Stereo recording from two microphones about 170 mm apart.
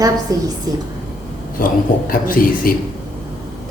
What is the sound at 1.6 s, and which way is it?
A man's voice, 55° left (ahead or behind).